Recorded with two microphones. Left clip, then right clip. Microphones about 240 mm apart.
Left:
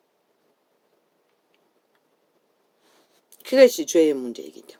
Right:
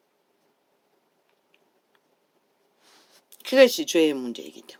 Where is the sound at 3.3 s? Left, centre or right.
Right.